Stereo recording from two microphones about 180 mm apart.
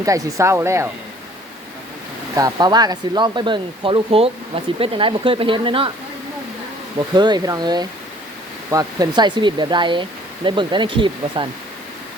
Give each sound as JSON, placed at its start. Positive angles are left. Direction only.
{"t": 0.0, "sound": "speech", "side_deg": -20}
{"t": 2.3, "sound": "speech", "side_deg": -20}
{"t": 7.2, "sound": "speech", "side_deg": -25}